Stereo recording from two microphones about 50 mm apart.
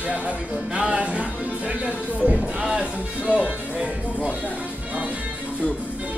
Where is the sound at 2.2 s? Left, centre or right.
Centre.